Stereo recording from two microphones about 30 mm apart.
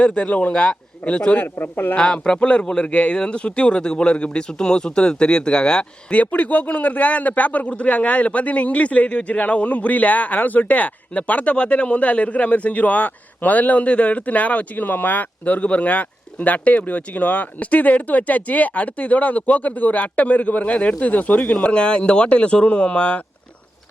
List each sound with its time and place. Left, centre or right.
0.0 s a man's voice: left
0.5 s speech: left
1.0 s a man's voice: left
1.4 s speech: left
2.0 s speech: left
4.4 s speech: left
6.1 s speech: left
11.5 s a man's voice: left
15.6 s a man's voice: left